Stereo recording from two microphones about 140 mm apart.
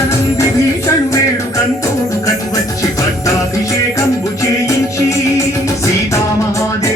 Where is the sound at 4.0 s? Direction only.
25° left (ahead or behind).